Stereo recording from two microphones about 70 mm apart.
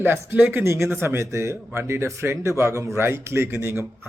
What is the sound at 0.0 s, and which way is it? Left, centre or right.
A man's voice, right.